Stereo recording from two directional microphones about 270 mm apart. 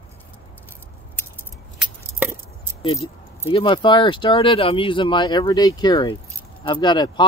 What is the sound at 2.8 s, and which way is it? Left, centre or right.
Speech, centre.